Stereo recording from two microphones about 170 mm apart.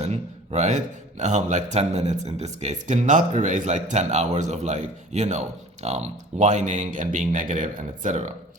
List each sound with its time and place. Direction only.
0.0 s speech: 40° right (ahead or behind)